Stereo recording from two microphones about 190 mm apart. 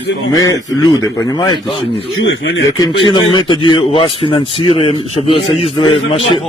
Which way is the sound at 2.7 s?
20° left (ahead or behind).